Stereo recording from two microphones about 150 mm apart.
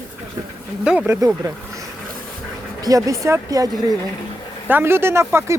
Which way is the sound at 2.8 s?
20° right (ahead or behind).